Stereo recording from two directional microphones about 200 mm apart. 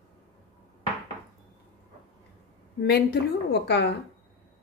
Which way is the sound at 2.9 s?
55° left (ahead or behind).